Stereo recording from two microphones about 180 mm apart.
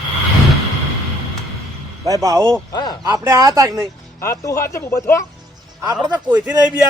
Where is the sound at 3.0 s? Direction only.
15° right (ahead or behind).